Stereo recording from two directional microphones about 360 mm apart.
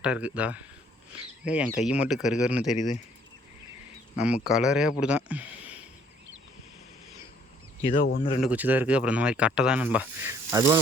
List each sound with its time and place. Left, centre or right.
0.0 s speech: centre
2.7 s speech: centre
4.2 s speech: centre
7.9 s speech: centre
8.4 s speech: centre